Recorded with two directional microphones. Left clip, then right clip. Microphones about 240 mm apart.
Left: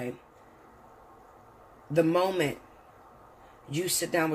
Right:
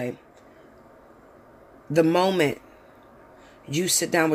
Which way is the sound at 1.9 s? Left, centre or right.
Right.